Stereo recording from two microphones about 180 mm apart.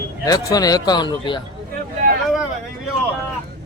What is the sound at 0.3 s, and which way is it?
A man's voice, 20° left (ahead or behind).